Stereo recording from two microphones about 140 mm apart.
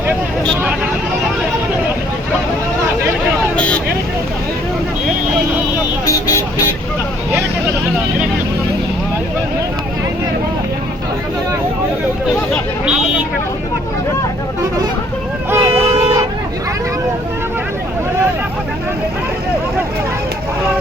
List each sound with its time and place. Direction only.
3.5 s vehicle: 5° left (ahead or behind)
6.1 s vehicle: 25° left (ahead or behind)
15.4 s vehicle: 20° right (ahead or behind)
15.7 s a sound: 50° right (ahead or behind)